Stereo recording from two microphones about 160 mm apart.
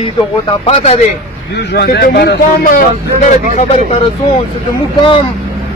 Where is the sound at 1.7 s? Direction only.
85° left; by 2.8 s 70° left (ahead or behind).